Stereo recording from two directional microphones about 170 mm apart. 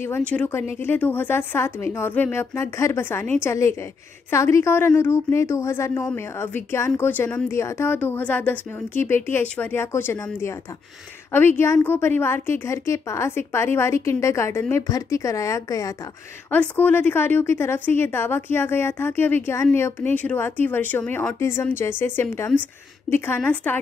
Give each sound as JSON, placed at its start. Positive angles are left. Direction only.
{"t": 0.3, "sound": "a woman's voice", "side_deg": 10}